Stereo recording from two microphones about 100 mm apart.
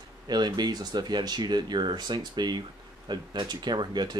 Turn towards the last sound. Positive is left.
turn(degrees=-45)  # may be behind; listen again after turning